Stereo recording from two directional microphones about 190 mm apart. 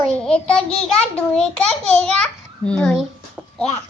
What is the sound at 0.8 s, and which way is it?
A child's voice, 5° left (ahead or behind).